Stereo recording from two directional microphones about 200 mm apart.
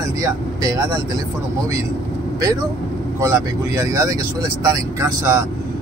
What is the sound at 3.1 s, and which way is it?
Speech, 15° right (ahead or behind).